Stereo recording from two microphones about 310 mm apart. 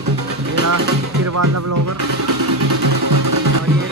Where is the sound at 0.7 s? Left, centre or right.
Right.